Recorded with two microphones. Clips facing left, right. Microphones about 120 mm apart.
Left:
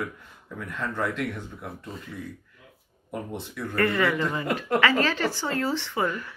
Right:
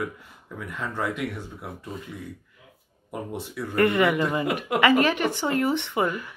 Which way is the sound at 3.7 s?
20° right (ahead or behind).